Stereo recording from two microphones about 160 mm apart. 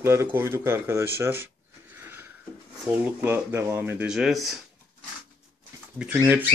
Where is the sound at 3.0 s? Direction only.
15° right (ahead or behind).